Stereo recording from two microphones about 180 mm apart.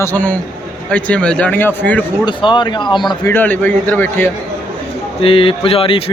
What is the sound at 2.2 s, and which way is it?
Speech, 25° left (ahead or behind).